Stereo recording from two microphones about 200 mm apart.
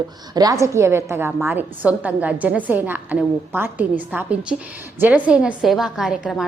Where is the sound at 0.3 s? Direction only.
15° right (ahead or behind).